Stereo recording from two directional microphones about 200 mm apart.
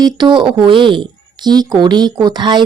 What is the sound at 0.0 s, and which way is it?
Speech, 20° right (ahead or behind).